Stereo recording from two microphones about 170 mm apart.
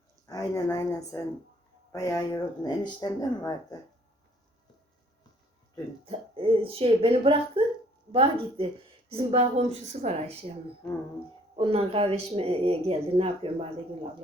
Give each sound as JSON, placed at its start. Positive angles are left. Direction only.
{"t": 0.3, "sound": "speech", "side_deg": 20}
{"t": 6.1, "sound": "speech", "side_deg": -35}
{"t": 11.5, "sound": "speech", "side_deg": -35}